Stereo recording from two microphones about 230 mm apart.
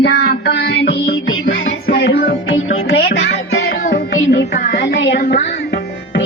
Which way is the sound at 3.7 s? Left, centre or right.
Left.